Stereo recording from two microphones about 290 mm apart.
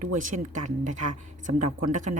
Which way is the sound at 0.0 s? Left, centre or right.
Right.